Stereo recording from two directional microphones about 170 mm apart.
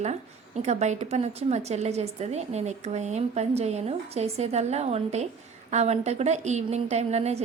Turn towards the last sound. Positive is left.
turn(degrees=-40)  # may be behind; listen again after turning